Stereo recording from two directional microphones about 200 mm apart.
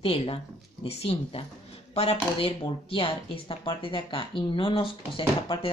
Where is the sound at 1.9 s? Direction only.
30° left (ahead or behind).